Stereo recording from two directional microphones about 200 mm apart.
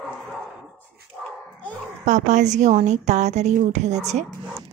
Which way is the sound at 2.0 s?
35° right (ahead or behind).